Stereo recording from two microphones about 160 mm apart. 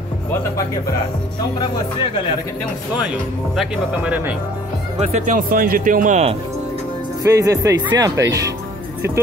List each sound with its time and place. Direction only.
3.0 s speech: 5° right (ahead or behind)
4.9 s speech: 45° right (ahead or behind)
7.2 s speech: 20° right (ahead or behind)